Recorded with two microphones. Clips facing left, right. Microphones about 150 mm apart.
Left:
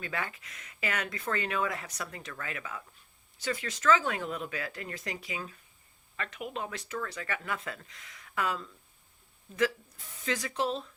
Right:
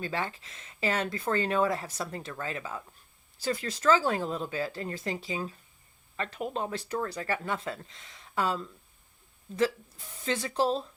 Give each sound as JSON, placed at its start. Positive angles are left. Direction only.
{"t": 0.0, "sound": "speech", "side_deg": -30}
{"t": 10.2, "sound": "speech", "side_deg": -30}